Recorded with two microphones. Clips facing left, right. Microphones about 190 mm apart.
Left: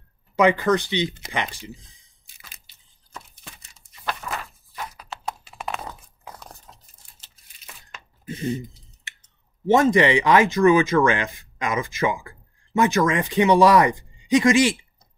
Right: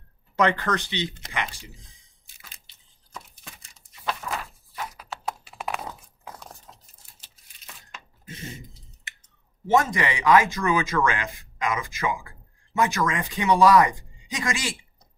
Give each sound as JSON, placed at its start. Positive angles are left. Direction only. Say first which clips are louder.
{"t": 0.4, "sound": "speech", "louder": "left 5 dB", "side_deg": 10}
{"t": 2.6, "sound": "a sound", "louder": "right 1 dB", "side_deg": 5}
{"t": 9.7, "sound": "speech", "louder": "left 6 dB", "side_deg": 25}